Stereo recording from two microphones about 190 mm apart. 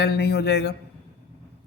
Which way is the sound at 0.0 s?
60° left (ahead or behind).